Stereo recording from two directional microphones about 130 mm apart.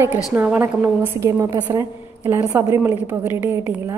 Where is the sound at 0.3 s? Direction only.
15° right (ahead or behind).